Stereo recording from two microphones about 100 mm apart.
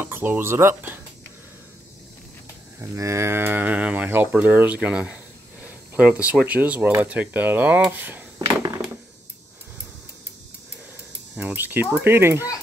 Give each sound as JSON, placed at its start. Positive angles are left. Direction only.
{"t": 0.0, "sound": "speech", "side_deg": -20}
{"t": 2.8, "sound": "speech", "side_deg": -30}
{"t": 11.3, "sound": "speech", "side_deg": -20}